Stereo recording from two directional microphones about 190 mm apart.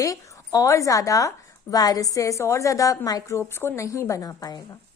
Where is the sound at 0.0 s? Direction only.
15° left (ahead or behind).